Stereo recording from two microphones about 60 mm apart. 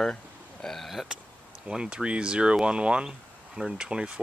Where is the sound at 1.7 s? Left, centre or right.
Centre.